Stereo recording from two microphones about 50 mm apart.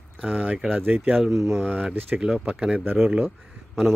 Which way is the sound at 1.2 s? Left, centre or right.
Centre.